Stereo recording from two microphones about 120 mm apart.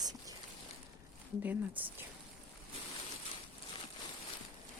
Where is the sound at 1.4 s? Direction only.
15° right (ahead or behind).